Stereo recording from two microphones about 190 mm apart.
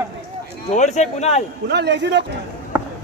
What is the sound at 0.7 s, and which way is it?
Speech, 40° left (ahead or behind).